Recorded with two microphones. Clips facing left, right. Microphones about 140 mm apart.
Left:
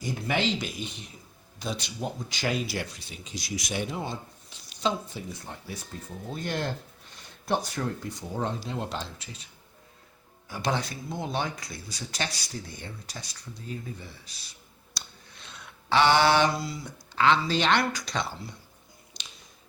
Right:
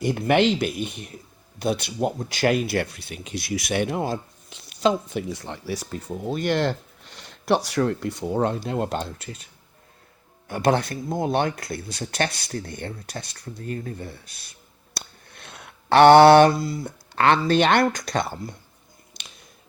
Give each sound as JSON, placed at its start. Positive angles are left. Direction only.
{"t": 0.0, "sound": "speech", "side_deg": -65}
{"t": 4.7, "sound": "speech", "side_deg": -65}
{"t": 10.5, "sound": "speech", "side_deg": -55}
{"t": 14.9, "sound": "a sound", "side_deg": -55}
{"t": 19.2, "sound": "finger snapping", "side_deg": -55}